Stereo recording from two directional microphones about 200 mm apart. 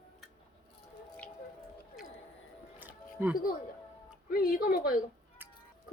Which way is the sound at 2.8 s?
10° right (ahead or behind).